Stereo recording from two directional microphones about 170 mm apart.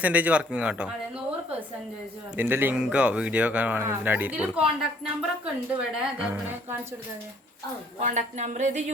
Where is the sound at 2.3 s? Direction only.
10° right (ahead or behind).